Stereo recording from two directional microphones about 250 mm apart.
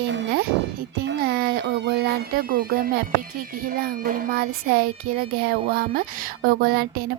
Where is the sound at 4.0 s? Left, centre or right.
Right.